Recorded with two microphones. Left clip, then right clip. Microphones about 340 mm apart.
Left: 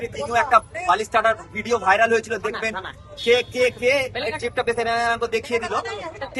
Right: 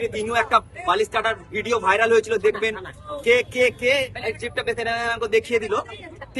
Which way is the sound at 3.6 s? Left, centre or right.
Centre.